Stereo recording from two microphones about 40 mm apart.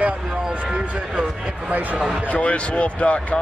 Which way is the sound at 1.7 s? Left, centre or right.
Right.